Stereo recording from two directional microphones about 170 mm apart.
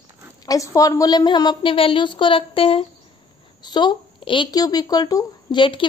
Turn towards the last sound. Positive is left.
turn(degrees=30)  # may be behind; listen again after turning